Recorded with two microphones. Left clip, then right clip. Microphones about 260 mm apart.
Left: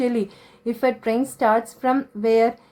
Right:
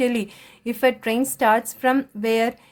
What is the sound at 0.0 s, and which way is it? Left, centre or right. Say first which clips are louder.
A woman's voice: even; right.